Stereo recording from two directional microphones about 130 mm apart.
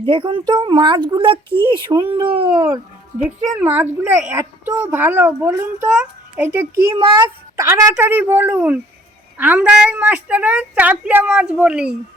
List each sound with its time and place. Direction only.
0.0 s speech: 40° right (ahead or behind)
3.6 s a woman's voice: 15° right (ahead or behind)
7.0 s a woman's voice: 35° right (ahead or behind); by 11.9 s 5° right (ahead or behind)